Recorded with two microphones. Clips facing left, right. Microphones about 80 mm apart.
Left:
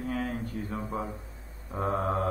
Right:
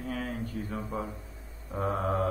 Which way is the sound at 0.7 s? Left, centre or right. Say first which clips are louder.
Left 1 dB; centre.